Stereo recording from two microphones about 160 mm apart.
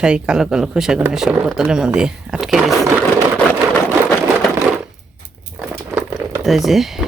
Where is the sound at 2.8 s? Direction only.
15° right (ahead or behind).